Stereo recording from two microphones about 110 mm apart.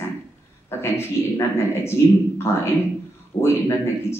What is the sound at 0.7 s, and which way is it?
Speech, 20° left (ahead or behind).